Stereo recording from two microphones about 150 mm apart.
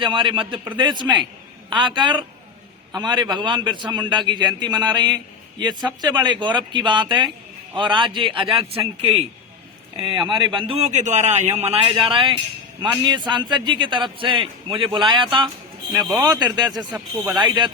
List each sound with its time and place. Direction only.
0.0 s a man's voice: 35° right (ahead or behind)
11.8 s a man's voice: 35° right (ahead or behind)